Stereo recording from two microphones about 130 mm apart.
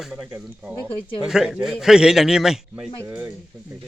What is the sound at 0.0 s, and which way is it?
Speech, 5° right (ahead or behind).